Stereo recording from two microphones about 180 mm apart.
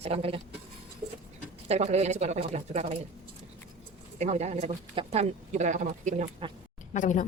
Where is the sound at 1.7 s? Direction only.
40° right (ahead or behind).